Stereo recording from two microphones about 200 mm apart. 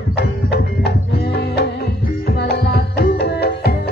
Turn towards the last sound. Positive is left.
turn(degrees=55)  # may be behind; listen again after turning